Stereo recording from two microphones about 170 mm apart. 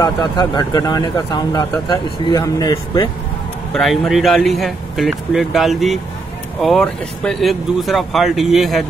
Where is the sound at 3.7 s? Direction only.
Centre (ahead or behind).